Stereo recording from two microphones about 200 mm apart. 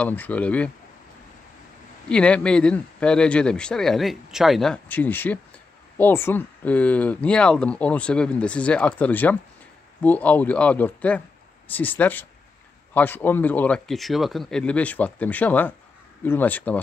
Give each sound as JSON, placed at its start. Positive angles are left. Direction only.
{"t": 0.0, "sound": "speech", "side_deg": 10}
{"t": 2.0, "sound": "a man's voice", "side_deg": 5}